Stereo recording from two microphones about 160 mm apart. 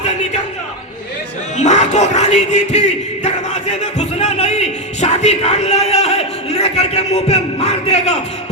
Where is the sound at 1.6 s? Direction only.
45° left (ahead or behind).